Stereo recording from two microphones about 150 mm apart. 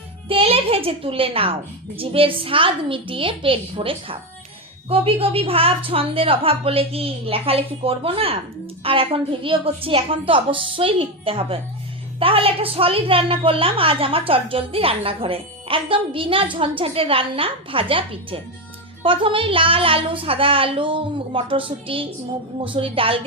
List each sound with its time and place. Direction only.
0.3 s a child's voice: 40° right (ahead or behind)